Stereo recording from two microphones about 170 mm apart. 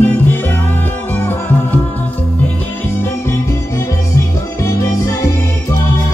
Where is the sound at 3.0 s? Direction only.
15° left (ahead or behind).